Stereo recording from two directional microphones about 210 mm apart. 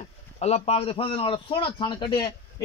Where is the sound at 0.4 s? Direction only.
30° left (ahead or behind).